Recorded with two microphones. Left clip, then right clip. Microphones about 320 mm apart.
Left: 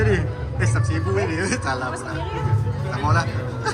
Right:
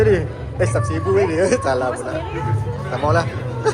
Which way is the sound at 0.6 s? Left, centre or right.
Centre.